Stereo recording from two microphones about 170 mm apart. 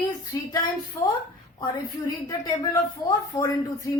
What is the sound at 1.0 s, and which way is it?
Speech, 20° left (ahead or behind).